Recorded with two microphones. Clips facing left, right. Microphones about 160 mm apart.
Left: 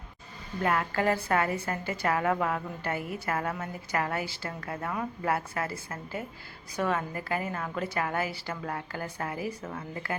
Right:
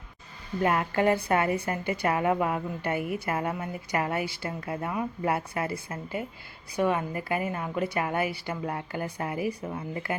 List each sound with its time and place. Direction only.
0.6 s a woman's voice: 20° right (ahead or behind)